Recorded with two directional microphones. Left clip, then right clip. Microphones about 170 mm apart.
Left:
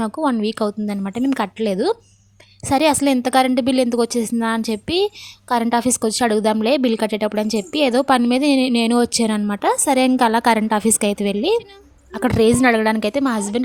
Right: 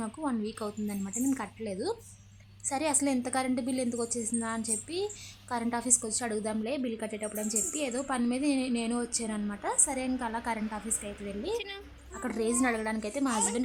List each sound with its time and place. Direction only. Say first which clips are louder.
0.0 s a woman's voice: left 15 dB; 45° left (ahead or behind)